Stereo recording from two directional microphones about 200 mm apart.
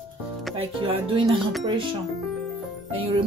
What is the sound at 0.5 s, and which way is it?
Speech, 30° right (ahead or behind).